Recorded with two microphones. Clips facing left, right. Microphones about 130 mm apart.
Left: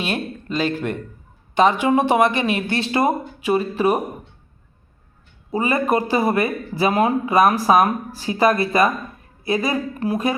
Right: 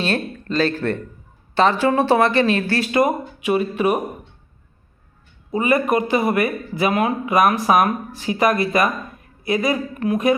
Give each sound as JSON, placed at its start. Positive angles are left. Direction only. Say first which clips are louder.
{"t": 0.0, "sound": "speech", "louder": "right 2 dB", "side_deg": 15}
{"t": 5.5, "sound": "speech", "louder": "right 1 dB", "side_deg": 30}